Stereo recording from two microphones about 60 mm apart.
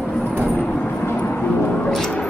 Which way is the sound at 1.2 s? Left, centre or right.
Left.